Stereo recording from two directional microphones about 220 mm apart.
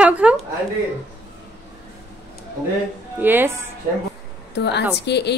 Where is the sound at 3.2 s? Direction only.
10° right (ahead or behind).